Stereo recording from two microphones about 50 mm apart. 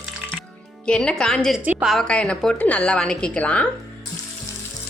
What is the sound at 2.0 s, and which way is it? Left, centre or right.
A woman's voice, left.